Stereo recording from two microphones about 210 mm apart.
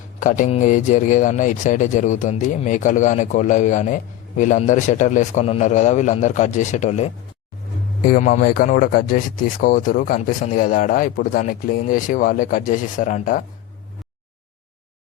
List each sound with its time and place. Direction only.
0.2 s speech: 40° left (ahead or behind)